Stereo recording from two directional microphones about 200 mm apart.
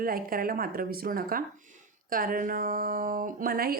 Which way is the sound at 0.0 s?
45° right (ahead or behind).